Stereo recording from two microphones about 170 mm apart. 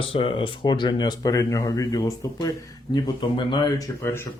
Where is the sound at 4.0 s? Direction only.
15° left (ahead or behind).